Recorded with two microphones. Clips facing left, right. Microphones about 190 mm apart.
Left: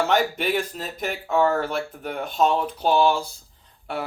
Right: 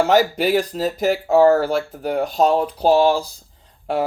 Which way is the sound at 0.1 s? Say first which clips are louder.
Right 6 dB; 40° right (ahead or behind).